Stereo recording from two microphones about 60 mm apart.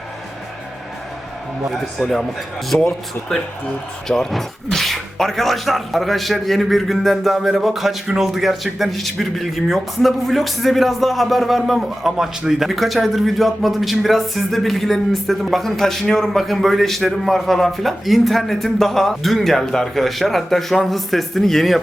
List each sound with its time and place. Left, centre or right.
1.7 s speech: centre
2.7 s speech: left
4.3 s speech: centre